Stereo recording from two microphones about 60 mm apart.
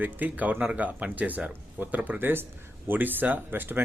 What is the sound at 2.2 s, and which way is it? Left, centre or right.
A man's voice, right.